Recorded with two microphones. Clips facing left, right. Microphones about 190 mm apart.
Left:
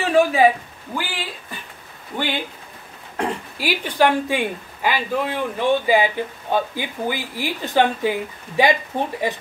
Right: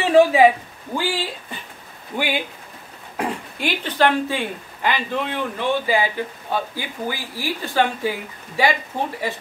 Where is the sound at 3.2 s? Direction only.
5° left (ahead or behind).